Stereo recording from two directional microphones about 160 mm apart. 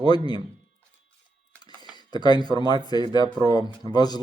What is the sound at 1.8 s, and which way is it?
Speech, 25° left (ahead or behind).